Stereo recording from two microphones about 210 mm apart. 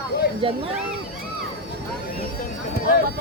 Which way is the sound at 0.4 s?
25° right (ahead or behind).